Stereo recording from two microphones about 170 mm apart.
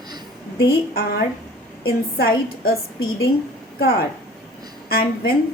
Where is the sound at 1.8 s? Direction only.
65° left (ahead or behind).